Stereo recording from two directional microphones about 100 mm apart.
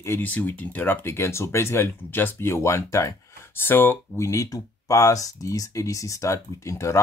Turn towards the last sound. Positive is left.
turn(degrees=30)  # may be behind; listen again after turning